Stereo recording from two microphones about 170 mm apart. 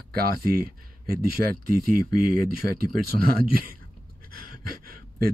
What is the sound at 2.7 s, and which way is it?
Speech, 60° right (ahead or behind).